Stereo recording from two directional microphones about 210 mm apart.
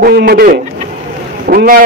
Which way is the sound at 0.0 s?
45° right (ahead or behind).